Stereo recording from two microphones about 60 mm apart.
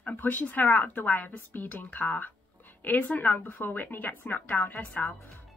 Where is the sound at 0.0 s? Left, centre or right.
Left.